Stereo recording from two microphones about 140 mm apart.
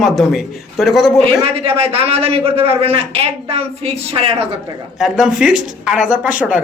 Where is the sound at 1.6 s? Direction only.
45° right (ahead or behind).